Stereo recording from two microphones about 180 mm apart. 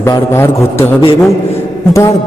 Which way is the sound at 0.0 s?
15° left (ahead or behind).